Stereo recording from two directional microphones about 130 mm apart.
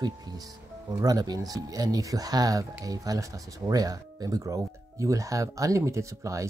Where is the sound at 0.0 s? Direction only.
30° right (ahead or behind).